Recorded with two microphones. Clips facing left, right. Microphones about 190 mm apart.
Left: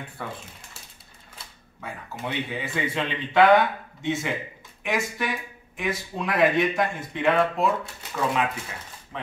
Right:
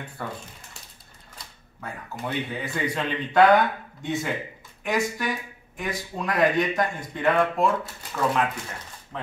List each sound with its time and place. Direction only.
1.4 s speech: centre (ahead or behind)